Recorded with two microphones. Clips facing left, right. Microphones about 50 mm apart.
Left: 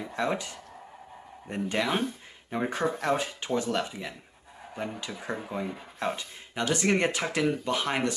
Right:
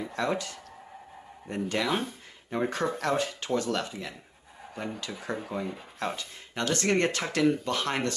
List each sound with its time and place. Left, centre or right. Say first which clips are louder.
0.0 s speech: even; centre